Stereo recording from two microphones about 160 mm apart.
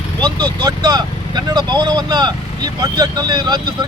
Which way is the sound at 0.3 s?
25° right (ahead or behind).